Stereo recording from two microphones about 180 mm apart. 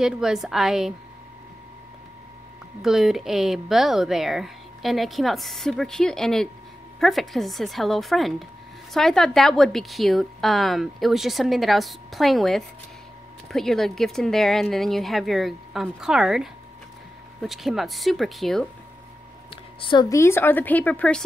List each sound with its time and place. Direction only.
0.0 s a woman's voice: 5° right (ahead or behind)
2.8 s a woman's voice: centre (ahead or behind)
19.5 s a woman's voice: 25° left (ahead or behind); by 21.2 s 10° left (ahead or behind)